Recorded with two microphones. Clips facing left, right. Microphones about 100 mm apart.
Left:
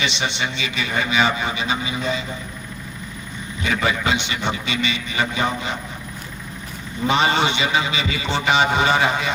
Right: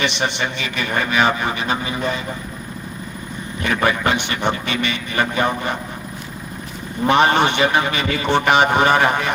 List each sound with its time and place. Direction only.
0.0 s speech: 55° right (ahead or behind)
3.6 s a man's voice: 55° right (ahead or behind)
7.1 s a man's voice: 55° right (ahead or behind)